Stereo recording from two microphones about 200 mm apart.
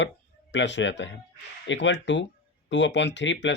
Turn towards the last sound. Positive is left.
turn(degrees=65)  # may be behind; listen again after turning